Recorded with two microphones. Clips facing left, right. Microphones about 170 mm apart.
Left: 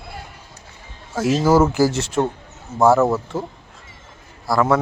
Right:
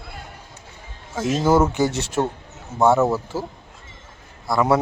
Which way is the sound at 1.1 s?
5° left (ahead or behind).